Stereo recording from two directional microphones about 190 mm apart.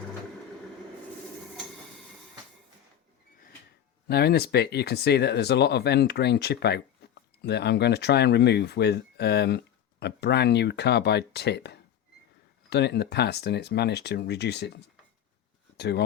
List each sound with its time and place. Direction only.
4.1 s speech: 55° left (ahead or behind)
15.8 s speech: 60° left (ahead or behind)